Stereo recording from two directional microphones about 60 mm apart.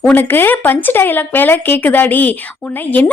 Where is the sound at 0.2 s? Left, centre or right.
Left.